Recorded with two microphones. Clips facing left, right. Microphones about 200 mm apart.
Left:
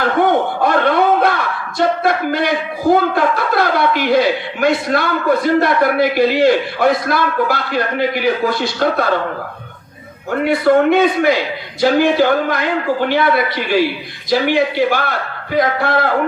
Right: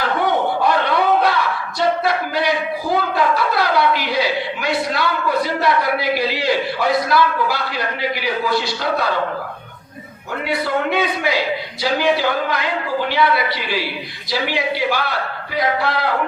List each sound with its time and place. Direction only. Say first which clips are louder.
0.0 s a sound: left 4 dB; 50° left (ahead or behind)
1.8 s a man's voice: left 3 dB; 50° left (ahead or behind)
10.4 s a man's voice: left 9 dB; 50° left (ahead or behind)